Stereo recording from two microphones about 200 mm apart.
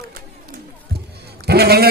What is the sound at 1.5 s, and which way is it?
Speech, 50° right (ahead or behind).